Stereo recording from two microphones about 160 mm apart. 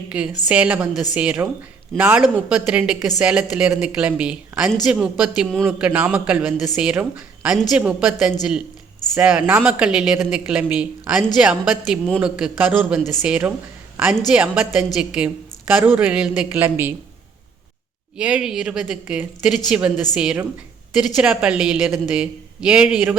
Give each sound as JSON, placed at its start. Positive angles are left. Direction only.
{"t": 0.1, "sound": "speech", "side_deg": -5}
{"t": 5.6, "sound": "speech", "side_deg": -10}
{"t": 13.9, "sound": "a sound", "side_deg": -10}
{"t": 14.3, "sound": "speech", "side_deg": -10}
{"t": 18.2, "sound": "speech", "side_deg": -5}